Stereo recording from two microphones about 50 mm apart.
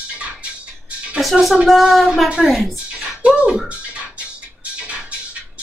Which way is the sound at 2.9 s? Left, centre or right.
Centre.